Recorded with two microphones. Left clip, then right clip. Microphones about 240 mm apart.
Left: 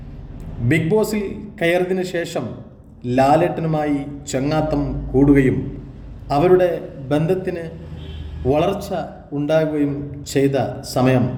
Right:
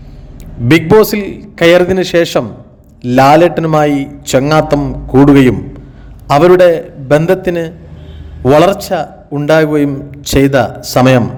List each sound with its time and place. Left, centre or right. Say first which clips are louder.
0.7 s a man's voice: right 11 dB; right
6.2 s a man's voice: right 10 dB; right